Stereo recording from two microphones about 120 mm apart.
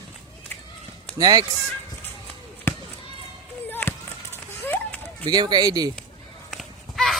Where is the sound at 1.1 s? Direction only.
35° right (ahead or behind).